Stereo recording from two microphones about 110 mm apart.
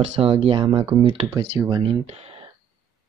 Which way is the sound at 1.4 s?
40° right (ahead or behind).